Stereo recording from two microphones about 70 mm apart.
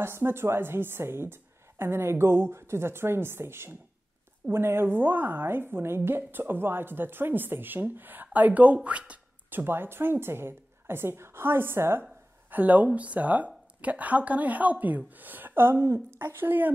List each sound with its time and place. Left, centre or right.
0.0 s a woman's voice: right; by 9.2 s centre
9.5 s a woman's voice: right
12.0 s a woman's voice: right